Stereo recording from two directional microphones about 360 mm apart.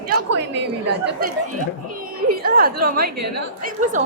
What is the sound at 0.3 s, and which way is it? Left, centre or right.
Speech, right.